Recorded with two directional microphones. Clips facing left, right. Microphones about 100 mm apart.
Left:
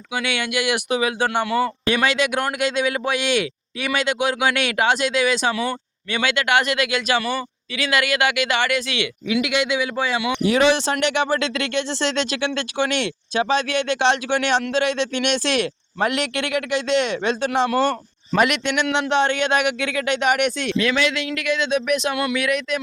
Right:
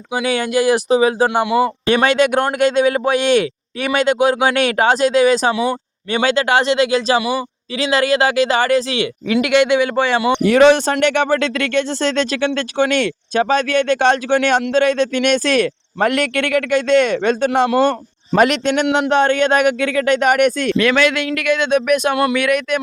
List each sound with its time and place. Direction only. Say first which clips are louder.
0.1 s speech: right 7 dB; 35° right (ahead or behind)
1.3 s a man's voice: right 5 dB; 15° right (ahead or behind)
2.0 s speech: right 6 dB; 45° right (ahead or behind); by 7.2 s 30° right (ahead or behind)
7.2 s a man's voice: right 5 dB; 10° right (ahead or behind)
7.8 s speech: right 5 dB; 30° right (ahead or behind)
9.3 s speech: right 8 dB; 60° right (ahead or behind)
10.4 s speech: right 6 dB; 55° right (ahead or behind)
18.3 s speech: right 5 dB; 40° right (ahead or behind)
20.7 s speech: right 6 dB; 65° right (ahead or behind)